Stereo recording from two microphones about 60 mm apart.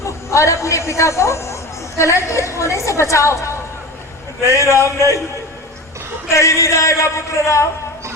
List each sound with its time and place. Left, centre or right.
0.0 s a man's voice: left
6.2 s a man's voice: left